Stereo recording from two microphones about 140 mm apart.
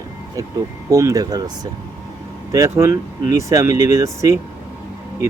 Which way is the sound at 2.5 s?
20° right (ahead or behind).